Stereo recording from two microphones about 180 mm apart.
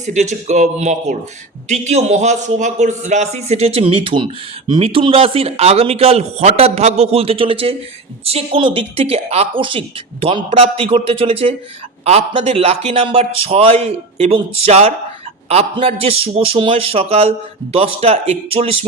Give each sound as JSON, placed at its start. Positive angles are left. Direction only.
{"t": 0.0, "sound": "a man's voice", "side_deg": -40}